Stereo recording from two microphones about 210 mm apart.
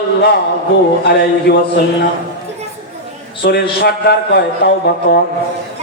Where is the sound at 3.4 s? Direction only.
50° left (ahead or behind).